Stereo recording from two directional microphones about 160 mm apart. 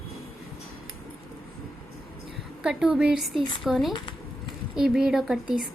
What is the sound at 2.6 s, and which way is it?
A woman's voice, 5° right (ahead or behind).